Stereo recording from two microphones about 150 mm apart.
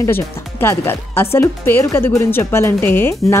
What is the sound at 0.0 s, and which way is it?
Speech, 15° left (ahead or behind).